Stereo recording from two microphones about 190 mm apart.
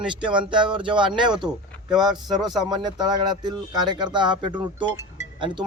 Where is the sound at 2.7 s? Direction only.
20° right (ahead or behind).